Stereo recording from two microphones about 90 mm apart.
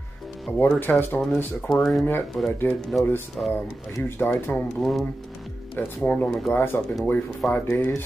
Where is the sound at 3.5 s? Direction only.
30° left (ahead or behind).